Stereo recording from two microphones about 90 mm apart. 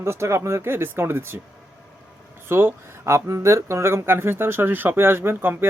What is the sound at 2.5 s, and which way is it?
Speech, 25° right (ahead or behind).